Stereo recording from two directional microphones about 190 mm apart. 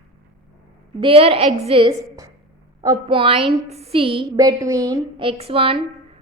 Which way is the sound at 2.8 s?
25° right (ahead or behind).